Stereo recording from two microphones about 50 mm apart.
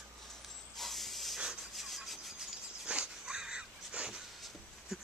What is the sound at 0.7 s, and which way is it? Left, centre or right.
Hiss, centre.